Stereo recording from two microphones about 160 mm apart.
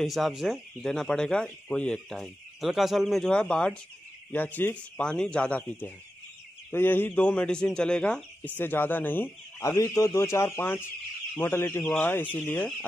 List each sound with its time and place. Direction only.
0.0 s speech: centre (ahead or behind); by 11.8 s 15° left (ahead or behind)
11.8 s speech: centre (ahead or behind)